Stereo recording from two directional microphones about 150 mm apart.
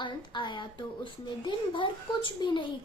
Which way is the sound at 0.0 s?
30° left (ahead or behind).